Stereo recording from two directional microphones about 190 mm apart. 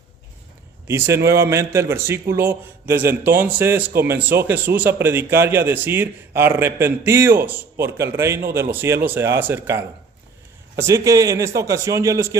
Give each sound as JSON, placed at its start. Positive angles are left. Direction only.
{"t": 0.9, "sound": "a man's voice", "side_deg": -15}